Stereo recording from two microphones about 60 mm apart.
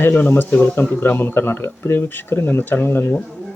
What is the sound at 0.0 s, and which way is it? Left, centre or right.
Speech, left.